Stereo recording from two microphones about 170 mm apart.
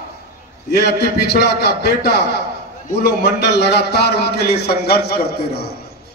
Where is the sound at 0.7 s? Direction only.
75° left (ahead or behind).